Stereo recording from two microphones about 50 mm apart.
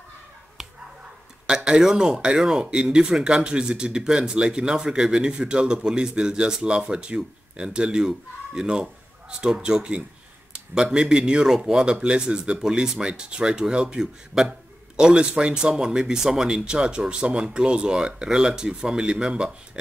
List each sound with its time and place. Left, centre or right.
0.6 s finger snapping: centre
1.5 s speech: centre